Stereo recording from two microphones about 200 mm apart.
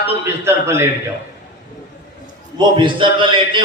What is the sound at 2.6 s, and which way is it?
A man's voice, 25° right (ahead or behind).